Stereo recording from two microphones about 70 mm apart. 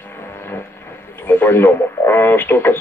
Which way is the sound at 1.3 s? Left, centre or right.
Left.